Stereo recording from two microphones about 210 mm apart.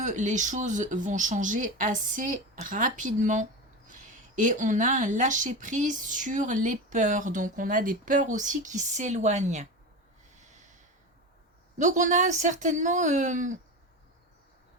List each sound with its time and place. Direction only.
0.0 s speech: 35° right (ahead or behind)
10.3 s snort: 35° right (ahead or behind)
11.8 s speech: 35° right (ahead or behind)